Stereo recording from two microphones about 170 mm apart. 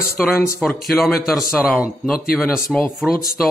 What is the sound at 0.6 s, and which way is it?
Speech, centre (ahead or behind).